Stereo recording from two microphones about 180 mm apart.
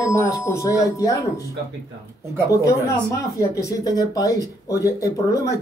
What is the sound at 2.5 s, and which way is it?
Speech, 15° left (ahead or behind).